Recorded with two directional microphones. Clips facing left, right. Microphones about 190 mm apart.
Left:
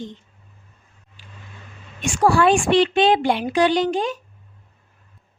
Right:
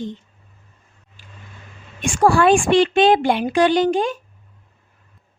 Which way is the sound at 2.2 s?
50° right (ahead or behind).